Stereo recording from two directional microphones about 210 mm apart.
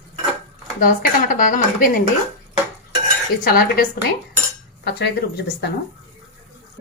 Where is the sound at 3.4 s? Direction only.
45° left (ahead or behind).